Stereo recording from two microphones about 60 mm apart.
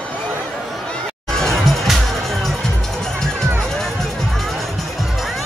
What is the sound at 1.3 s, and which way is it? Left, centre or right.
Music, centre.